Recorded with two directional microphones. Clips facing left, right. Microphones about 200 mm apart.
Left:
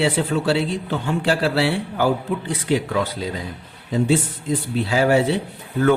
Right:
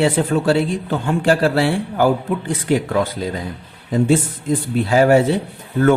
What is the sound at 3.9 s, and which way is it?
A man's voice, 50° right (ahead or behind).